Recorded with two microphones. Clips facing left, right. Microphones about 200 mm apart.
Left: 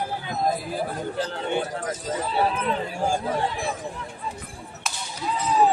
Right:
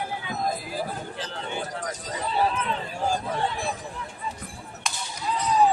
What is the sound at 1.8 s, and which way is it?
Speech, centre (ahead or behind).